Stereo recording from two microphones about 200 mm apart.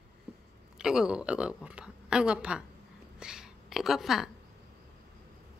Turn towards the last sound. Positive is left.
turn(degrees=0)  # may be behind; listen again after turning